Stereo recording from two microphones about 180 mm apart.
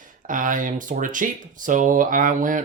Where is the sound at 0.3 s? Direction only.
50° right (ahead or behind).